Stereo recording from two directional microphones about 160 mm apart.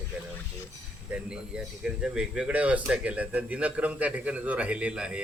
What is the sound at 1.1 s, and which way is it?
Speech, 5° right (ahead or behind).